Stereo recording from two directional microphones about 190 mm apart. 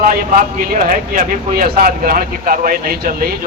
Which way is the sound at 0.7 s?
45° right (ahead or behind).